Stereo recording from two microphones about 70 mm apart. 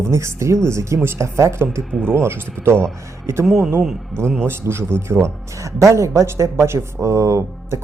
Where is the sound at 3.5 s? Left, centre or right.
Centre.